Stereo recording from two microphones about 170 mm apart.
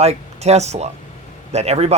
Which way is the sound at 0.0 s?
40° right (ahead or behind).